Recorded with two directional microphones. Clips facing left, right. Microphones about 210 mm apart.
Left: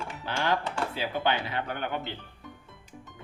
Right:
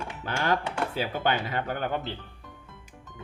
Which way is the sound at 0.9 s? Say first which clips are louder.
Right 1 dB; 45° right (ahead or behind).